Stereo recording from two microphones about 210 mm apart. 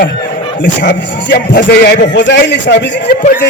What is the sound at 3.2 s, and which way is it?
Speech, 40° left (ahead or behind).